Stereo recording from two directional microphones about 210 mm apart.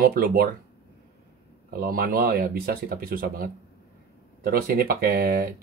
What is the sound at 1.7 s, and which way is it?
Speech, 45° right (ahead or behind).